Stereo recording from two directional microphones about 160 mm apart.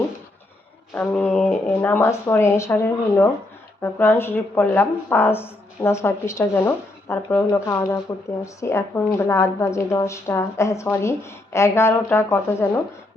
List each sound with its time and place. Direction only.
0.9 s speech: 10° left (ahead or behind)